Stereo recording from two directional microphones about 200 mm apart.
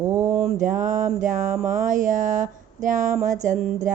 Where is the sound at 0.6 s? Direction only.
40° right (ahead or behind).